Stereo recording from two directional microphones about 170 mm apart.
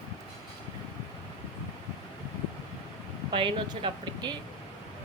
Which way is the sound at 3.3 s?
30° right (ahead or behind).